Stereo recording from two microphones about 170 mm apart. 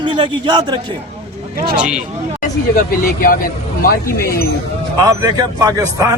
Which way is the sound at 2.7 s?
55° left (ahead or behind).